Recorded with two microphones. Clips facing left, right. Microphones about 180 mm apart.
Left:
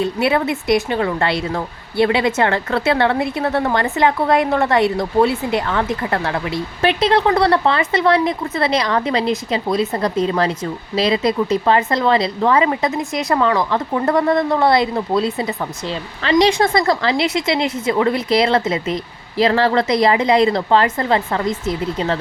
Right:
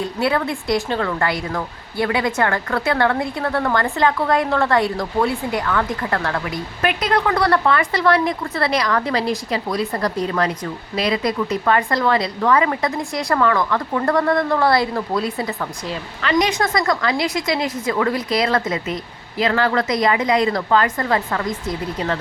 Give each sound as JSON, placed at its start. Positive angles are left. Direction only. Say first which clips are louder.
{"t": 0.0, "sound": "a woman's voice", "louder": "left 3 dB", "side_deg": 20}